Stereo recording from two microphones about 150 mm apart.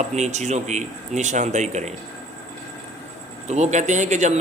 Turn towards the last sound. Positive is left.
turn(degrees=-50)  # may be behind; listen again after turning